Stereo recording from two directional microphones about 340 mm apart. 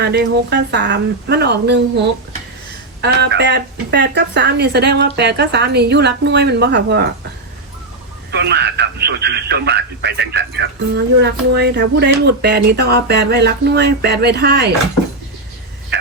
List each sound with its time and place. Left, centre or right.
0.0 s speech: right
3.0 s speech: right
8.3 s speech: right